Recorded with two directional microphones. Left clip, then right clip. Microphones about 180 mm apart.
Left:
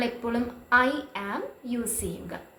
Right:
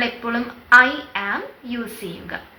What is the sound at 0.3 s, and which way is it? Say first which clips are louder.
A woman's voice: right 11 dB; 25° left (ahead or behind).